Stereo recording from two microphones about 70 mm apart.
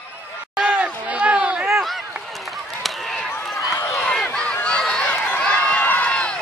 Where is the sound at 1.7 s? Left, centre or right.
Centre.